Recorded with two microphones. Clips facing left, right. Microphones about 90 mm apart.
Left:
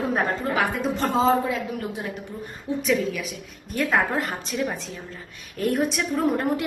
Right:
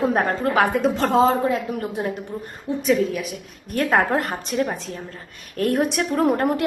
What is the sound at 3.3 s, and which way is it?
A woman's voice, 60° right (ahead or behind).